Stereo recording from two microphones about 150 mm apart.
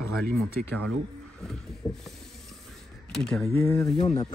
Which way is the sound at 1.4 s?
Centre (ahead or behind).